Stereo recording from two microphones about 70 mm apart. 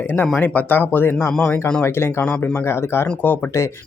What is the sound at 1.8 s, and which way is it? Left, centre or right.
Speech, left.